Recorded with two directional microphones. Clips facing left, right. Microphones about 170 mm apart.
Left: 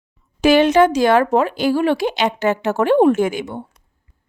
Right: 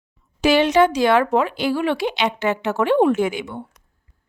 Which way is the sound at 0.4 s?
50° left (ahead or behind).